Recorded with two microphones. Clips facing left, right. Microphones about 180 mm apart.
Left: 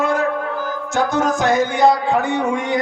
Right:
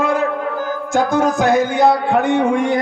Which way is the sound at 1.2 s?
60° right (ahead or behind).